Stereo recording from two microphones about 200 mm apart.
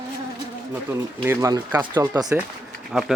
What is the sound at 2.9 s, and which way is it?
Speech, centre (ahead or behind).